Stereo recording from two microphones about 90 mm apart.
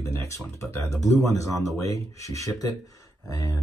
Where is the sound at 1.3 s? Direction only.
35° left (ahead or behind).